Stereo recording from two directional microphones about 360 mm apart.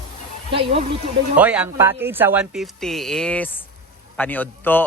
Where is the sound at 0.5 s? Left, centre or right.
Centre.